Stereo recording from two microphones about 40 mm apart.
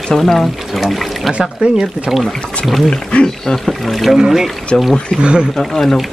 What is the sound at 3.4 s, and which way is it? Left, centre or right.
Speech, centre.